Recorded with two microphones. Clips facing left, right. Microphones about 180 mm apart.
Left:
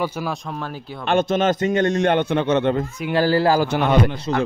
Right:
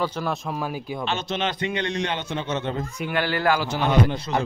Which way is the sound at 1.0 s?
50° left (ahead or behind).